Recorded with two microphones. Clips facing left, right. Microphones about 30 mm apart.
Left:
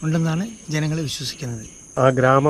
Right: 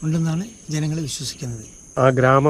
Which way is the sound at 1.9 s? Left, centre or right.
Right.